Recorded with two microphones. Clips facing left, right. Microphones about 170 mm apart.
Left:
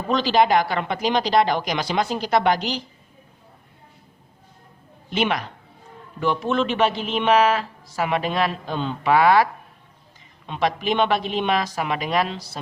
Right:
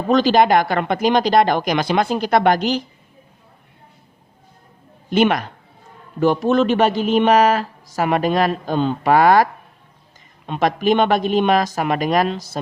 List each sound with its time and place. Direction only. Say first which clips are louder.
0.1 s speech: right 4 dB; 50° right (ahead or behind)
5.1 s speech: right 7 dB; 50° right (ahead or behind)